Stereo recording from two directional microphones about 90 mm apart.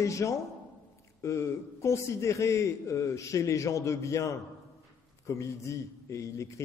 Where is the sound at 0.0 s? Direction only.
35° left (ahead or behind).